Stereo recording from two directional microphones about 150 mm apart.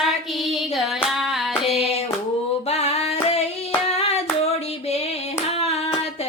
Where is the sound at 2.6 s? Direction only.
45° left (ahead or behind).